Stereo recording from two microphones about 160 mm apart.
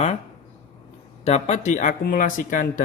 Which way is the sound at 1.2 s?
40° left (ahead or behind).